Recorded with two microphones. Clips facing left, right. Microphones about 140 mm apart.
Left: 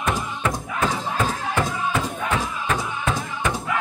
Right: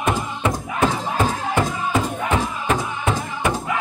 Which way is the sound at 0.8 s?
25° right (ahead or behind).